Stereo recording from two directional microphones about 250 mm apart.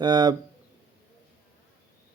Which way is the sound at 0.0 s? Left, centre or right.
Centre.